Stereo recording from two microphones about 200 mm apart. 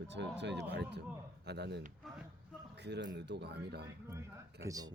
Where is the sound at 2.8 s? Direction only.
60° right (ahead or behind).